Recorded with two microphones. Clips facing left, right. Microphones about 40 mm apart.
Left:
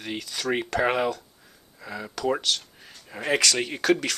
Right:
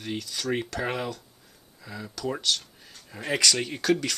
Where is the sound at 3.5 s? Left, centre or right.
Left.